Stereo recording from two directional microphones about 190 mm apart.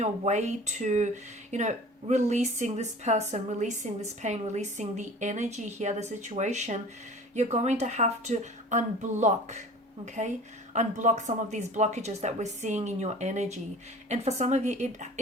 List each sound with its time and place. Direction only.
0.0 s speech: 35° right (ahead or behind)
10.8 s speech: 40° right (ahead or behind)